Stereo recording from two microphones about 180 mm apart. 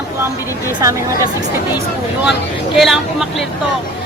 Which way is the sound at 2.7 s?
Centre (ahead or behind).